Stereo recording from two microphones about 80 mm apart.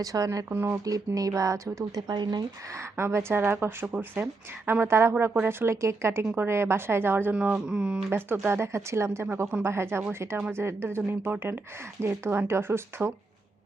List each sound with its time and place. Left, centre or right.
0.0 s speech: right
0.5 s speech: right
0.9 s speech: right
2.0 s speech: right
3.0 s speech: right
7.3 s speech: centre
8.1 s speech: right